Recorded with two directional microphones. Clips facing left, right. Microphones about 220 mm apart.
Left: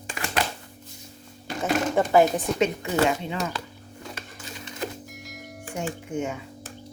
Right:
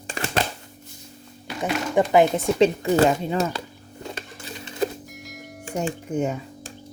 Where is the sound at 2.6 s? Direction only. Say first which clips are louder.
Right 7 dB; 35° right (ahead or behind).